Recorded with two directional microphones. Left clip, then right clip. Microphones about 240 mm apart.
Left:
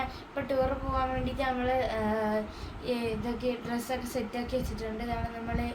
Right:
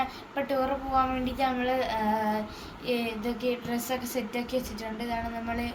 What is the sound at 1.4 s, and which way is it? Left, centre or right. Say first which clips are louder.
Speech: right 3 dB; centre.